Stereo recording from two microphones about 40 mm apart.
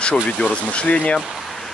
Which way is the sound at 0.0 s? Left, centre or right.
Left.